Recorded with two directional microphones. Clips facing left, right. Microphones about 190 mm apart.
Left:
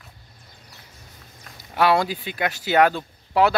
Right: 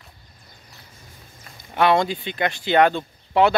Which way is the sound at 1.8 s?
5° left (ahead or behind).